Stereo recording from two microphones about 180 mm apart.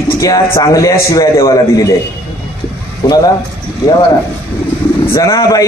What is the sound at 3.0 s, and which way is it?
Speech, 20° left (ahead or behind).